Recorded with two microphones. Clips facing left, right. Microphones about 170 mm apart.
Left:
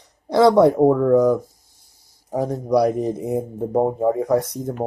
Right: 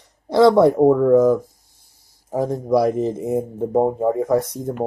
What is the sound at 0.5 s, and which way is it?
Speech, centre (ahead or behind).